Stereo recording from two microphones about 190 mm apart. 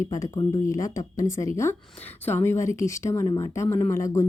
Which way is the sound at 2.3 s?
10° left (ahead or behind).